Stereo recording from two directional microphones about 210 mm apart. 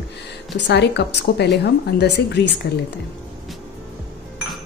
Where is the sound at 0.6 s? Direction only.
55° left (ahead or behind).